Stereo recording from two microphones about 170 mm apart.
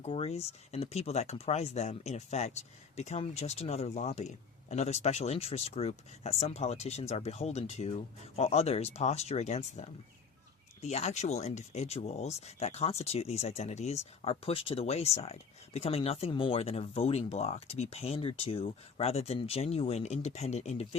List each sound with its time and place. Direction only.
0.0 s speech: 35° left (ahead or behind)